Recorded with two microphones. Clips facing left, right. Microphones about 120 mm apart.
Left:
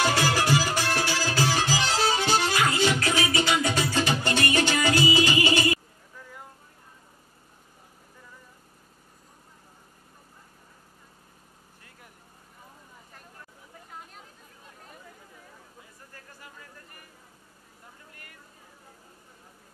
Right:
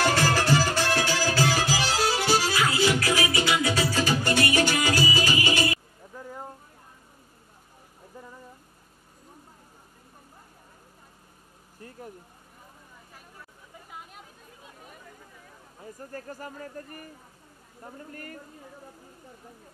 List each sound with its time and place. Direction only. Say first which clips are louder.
0.0 s music: right 1 dB; 15° left (ahead or behind)
0.9 s music: right 2 dB; 15° right (ahead or behind)
1.2 s music: right 1 dB; 20° left (ahead or behind)
1.6 s music: even; 10° right (ahead or behind)
3.9 s music: right 1 dB; 20° left (ahead or behind)
6.1 s vehicle: right 7 dB; 40° right (ahead or behind)
15.8 s a sound: right 11 dB; 40° right (ahead or behind)